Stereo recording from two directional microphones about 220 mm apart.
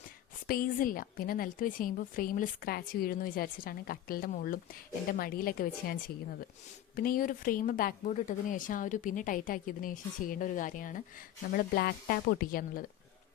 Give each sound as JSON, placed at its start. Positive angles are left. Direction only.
{"t": 0.4, "sound": "a woman's voice", "side_deg": 40}